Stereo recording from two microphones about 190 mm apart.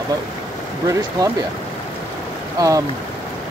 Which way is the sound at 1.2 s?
20° right (ahead or behind).